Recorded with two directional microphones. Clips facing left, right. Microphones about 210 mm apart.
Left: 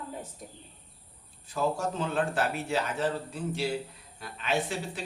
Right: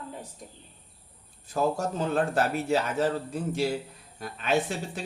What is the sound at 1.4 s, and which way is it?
A man's voice, 45° right (ahead or behind).